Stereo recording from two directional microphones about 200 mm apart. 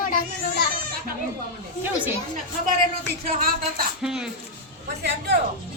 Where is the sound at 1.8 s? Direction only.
10° right (ahead or behind).